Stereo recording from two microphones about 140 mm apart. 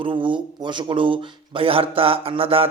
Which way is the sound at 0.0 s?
35° right (ahead or behind).